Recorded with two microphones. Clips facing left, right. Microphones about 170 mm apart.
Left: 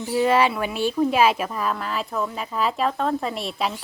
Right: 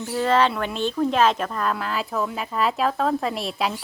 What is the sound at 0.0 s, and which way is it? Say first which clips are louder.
A woman's voice: left 1 dB; 10° left (ahead or behind).